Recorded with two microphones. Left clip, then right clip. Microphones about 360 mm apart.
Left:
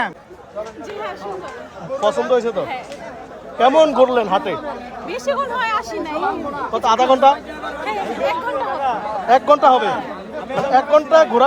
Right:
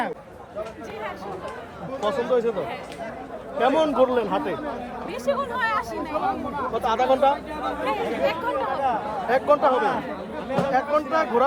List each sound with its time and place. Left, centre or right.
2.0 s speech: left
3.6 s speech: left
5.0 s speech: centre
6.7 s speech: left
7.9 s speech: centre
8.8 s speech: left